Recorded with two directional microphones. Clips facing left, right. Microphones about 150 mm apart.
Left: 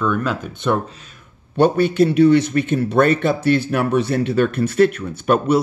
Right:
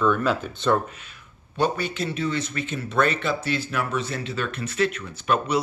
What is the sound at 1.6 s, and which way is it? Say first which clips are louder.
Speech: left 10 dB; 55° left (ahead or behind).